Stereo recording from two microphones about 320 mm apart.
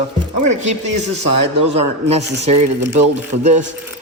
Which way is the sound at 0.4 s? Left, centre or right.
Right.